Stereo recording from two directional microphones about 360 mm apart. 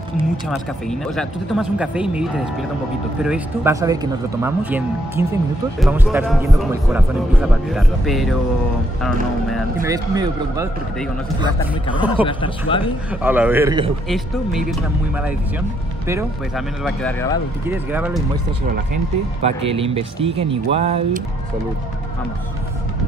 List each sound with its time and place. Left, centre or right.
0.8 s speech: centre
9.8 s speech: centre
12.0 s speech: centre
12.3 s speech: centre
13.2 s speech: centre
14.0 s speech: centre
19.4 s speech: centre